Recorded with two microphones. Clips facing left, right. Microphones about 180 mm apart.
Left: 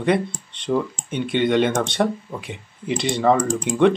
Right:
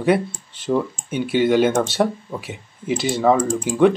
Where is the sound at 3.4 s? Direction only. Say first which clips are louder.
Right 1 dB; 70° left (ahead or behind).